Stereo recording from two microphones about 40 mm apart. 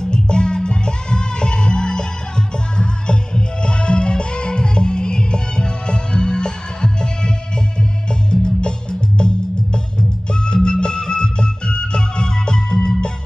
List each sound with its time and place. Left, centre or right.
0.0 s music: left
10.4 s music: left